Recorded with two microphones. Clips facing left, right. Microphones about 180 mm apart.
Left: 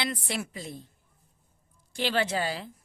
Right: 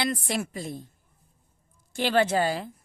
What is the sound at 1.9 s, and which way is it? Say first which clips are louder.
Speech: right 5 dB; 50° right (ahead or behind).